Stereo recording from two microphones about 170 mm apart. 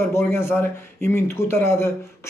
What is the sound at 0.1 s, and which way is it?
A man's voice, 15° left (ahead or behind).